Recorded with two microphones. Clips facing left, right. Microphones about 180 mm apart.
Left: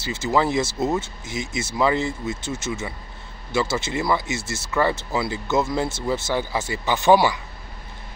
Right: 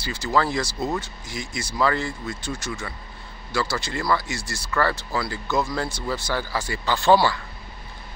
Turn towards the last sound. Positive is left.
turn(degrees=15)  # may be behind; listen again after turning